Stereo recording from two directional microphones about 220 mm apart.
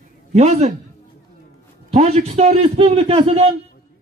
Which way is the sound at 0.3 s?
30° right (ahead or behind).